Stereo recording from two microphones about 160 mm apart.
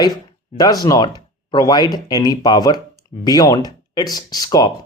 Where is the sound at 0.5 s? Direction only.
25° left (ahead or behind).